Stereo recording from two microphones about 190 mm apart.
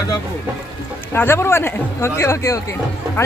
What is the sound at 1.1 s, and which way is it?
Speech, 10° left (ahead or behind).